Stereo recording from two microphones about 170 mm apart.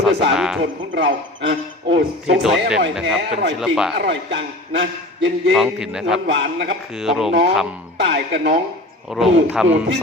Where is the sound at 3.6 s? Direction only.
5° right (ahead or behind).